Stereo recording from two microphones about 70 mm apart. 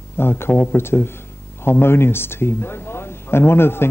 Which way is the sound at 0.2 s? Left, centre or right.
Left.